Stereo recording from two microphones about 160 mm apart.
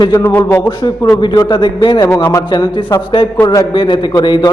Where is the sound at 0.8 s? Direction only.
25° left (ahead or behind).